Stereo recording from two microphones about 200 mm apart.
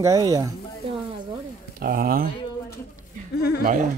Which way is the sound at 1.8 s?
45° right (ahead or behind).